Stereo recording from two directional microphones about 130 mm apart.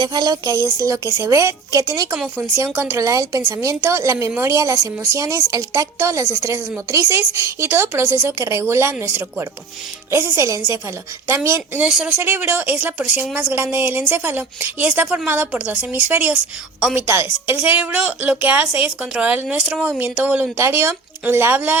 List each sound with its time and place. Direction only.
0.0 s a woman's voice: 30° right (ahead or behind)
2.1 s a woman's voice: 10° right (ahead or behind)
11.9 s speech: 5° right (ahead or behind)
12.1 s a woman's voice: 15° right (ahead or behind)